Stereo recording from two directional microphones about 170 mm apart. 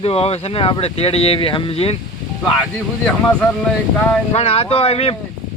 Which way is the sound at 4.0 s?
5° left (ahead or behind).